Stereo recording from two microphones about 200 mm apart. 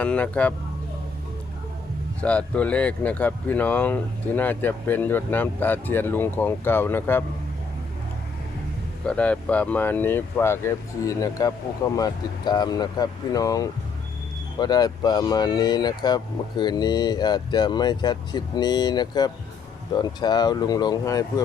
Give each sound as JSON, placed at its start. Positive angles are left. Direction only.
{"t": 0.0, "sound": "speech", "side_deg": 5}
{"t": 2.2, "sound": "speech", "side_deg": 5}
{"t": 9.0, "sound": "speech", "side_deg": 5}